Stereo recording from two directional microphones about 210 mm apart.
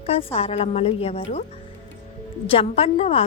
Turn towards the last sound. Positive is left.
turn(degrees=30)  # may be behind; listen again after turning